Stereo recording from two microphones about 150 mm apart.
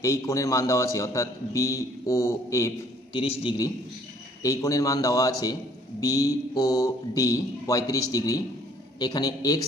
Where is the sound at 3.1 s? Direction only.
35° left (ahead or behind).